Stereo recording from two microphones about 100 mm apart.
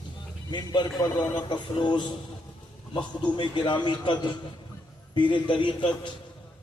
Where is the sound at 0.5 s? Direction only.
50° left (ahead or behind).